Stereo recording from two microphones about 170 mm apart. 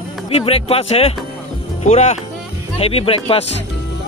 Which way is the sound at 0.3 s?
35° left (ahead or behind).